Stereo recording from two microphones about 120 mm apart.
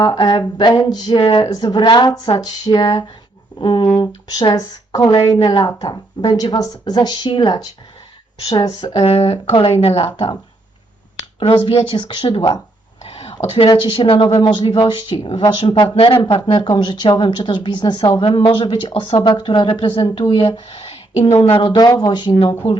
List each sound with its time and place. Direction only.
0.0 s a woman's voice: 40° left (ahead or behind)
8.8 s speech: 60° left (ahead or behind)
11.3 s speech: 45° left (ahead or behind)
13.1 s a sound: 55° left (ahead or behind)
13.7 s speech: 40° left (ahead or behind)
18.2 s speech: 45° left (ahead or behind)